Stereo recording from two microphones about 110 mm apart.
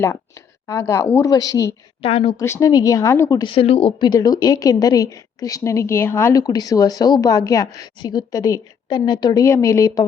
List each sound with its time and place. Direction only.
0.0 s speech: 25° left (ahead or behind)
2.0 s speech: 65° left (ahead or behind)
2.4 s speech: 25° left (ahead or behind)
3.5 s a woman's voice: 60° left (ahead or behind); by 6.4 s 20° left (ahead or behind)
6.4 s a woman's voice: 35° left (ahead or behind)
9.4 s speech: 30° left (ahead or behind)